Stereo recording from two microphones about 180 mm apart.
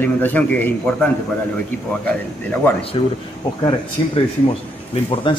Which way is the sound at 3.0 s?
30° left (ahead or behind).